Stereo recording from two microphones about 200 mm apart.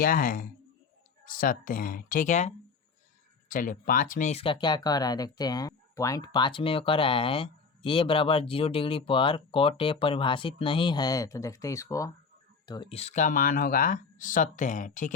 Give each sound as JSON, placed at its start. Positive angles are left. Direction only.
{"t": 0.0, "sound": "speech", "side_deg": 45}
{"t": 3.5, "sound": "speech", "side_deg": 45}